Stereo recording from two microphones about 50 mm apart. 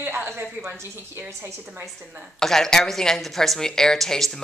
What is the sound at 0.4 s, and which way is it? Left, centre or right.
Speech, right.